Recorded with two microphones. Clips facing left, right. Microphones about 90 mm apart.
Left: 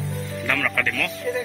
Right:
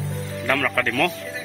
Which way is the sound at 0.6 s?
30° right (ahead or behind).